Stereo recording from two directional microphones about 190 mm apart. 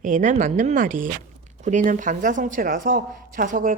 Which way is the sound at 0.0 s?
40° right (ahead or behind).